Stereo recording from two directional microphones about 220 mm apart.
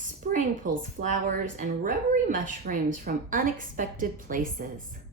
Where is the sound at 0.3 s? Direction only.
35° right (ahead or behind).